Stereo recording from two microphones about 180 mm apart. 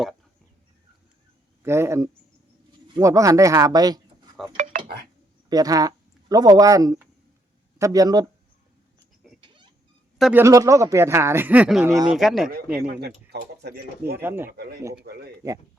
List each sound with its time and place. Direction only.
1.6 s speech: 15° right (ahead or behind)
4.5 s dishes: 40° right (ahead or behind)
5.5 s speech: 20° right (ahead or behind)
9.4 s rodents: 25° right (ahead or behind)
10.2 s a man's voice: 5° right (ahead or behind)
10.4 s speech: 20° right (ahead or behind)
11.9 s speech: 20° right (ahead or behind)
12.1 s speech: centre (ahead or behind)
12.5 s speech: 55° right (ahead or behind)
14.2 s speech: 10° right (ahead or behind)
14.5 s speech: 65° right (ahead or behind)